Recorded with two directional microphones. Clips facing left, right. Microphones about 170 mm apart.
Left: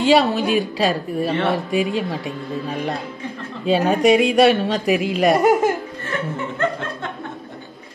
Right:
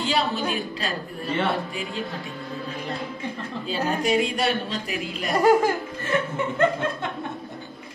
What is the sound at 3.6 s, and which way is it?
Speech, 75° left (ahead or behind).